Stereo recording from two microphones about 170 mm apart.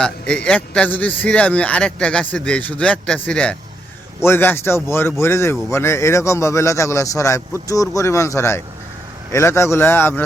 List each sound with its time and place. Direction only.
0.0 s a man's voice: 5° left (ahead or behind)